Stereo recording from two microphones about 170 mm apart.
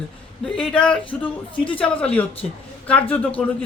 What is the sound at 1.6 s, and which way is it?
Speech, 30° left (ahead or behind).